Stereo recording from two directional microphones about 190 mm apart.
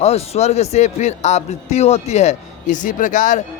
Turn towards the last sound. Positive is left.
turn(degrees=40)  # may be behind; listen again after turning